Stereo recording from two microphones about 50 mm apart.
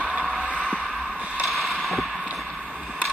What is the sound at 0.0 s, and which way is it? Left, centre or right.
Vehicle, right.